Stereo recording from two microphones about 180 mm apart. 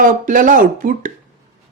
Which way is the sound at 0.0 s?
50° right (ahead or behind).